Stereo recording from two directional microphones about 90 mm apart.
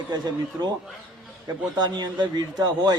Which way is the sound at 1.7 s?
55° right (ahead or behind).